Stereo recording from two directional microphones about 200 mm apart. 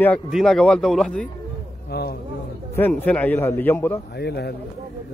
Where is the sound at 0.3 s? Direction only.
Centre (ahead or behind).